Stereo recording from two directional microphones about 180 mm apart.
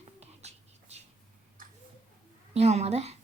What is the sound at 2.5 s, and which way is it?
Speech, 35° right (ahead or behind).